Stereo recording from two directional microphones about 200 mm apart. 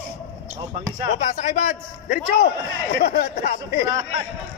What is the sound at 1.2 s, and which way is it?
A man's voice, 40° left (ahead or behind).